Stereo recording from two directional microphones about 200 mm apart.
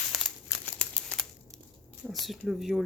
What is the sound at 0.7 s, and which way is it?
Crumpling, 5° left (ahead or behind).